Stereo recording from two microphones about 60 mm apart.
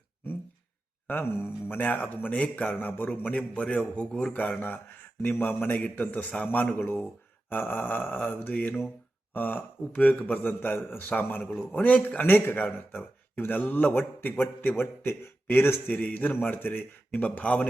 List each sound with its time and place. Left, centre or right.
1.0 s a man's voice: left; by 4.4 s centre
4.6 s a man's voice: left
12.6 s a man's voice: left
15.9 s a man's voice: left